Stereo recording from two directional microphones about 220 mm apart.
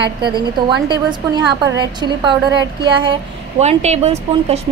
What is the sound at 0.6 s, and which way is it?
Speech, 20° right (ahead or behind).